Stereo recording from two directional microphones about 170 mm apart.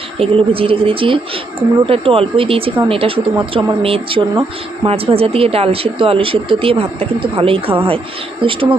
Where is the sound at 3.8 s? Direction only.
35° right (ahead or behind).